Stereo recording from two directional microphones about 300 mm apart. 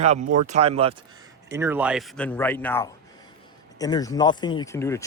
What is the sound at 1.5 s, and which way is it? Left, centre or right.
A man's voice, centre.